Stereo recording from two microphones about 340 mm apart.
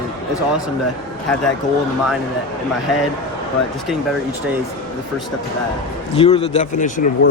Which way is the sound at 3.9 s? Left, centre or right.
Centre.